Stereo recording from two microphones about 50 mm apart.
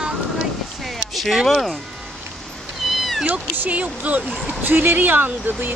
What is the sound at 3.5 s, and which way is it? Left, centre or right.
Speech, right.